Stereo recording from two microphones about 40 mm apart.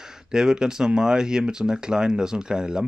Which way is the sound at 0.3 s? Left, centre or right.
Centre.